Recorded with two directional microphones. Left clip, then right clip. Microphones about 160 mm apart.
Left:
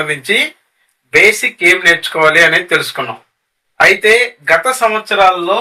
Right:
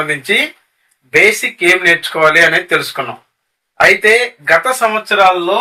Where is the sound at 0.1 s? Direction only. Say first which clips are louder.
Even; 20° left (ahead or behind).